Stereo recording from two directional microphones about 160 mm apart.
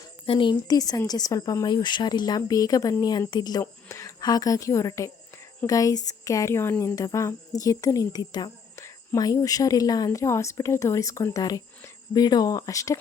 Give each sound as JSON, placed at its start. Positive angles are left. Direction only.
{"t": 0.3, "sound": "speech", "side_deg": 30}